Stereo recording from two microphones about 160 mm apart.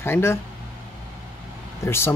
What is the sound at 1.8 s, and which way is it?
Speech, 15° left (ahead or behind).